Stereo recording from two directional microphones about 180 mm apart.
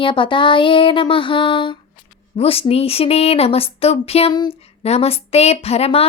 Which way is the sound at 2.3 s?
35° left (ahead or behind).